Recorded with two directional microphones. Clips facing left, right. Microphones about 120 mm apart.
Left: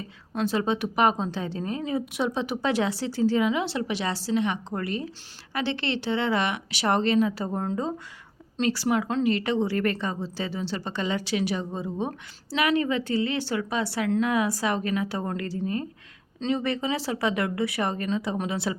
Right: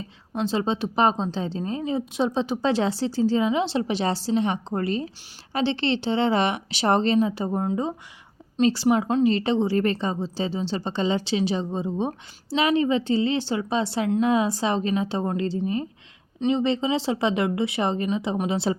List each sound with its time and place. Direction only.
0.3 s a woman's voice: 25° right (ahead or behind)